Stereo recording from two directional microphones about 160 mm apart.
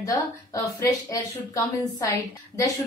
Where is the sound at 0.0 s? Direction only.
20° left (ahead or behind).